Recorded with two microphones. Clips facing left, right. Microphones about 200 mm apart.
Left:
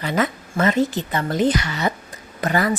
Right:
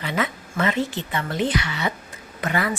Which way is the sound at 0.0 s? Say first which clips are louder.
Left 4 dB; 40° left (ahead or behind).